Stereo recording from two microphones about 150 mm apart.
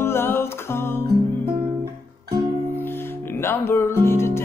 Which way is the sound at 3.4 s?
15° left (ahead or behind).